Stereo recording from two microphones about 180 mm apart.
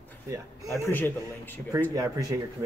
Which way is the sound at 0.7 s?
10° left (ahead or behind).